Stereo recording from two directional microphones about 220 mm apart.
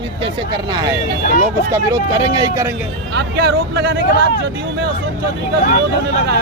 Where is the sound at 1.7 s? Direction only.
15° right (ahead or behind).